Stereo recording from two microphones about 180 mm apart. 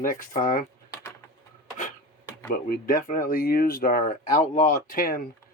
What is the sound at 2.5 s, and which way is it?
Speech, 50° left (ahead or behind).